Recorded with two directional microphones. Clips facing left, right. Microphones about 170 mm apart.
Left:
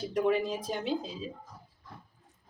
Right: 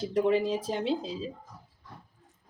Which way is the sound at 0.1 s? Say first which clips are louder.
Right 2 dB; 30° right (ahead or behind).